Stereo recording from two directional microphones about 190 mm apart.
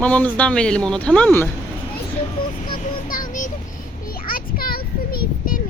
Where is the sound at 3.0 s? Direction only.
45° left (ahead or behind).